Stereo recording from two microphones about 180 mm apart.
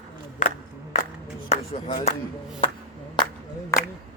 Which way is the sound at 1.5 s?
35° left (ahead or behind).